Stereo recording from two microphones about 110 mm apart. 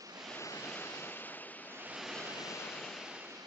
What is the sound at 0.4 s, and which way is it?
Waves, 25° left (ahead or behind).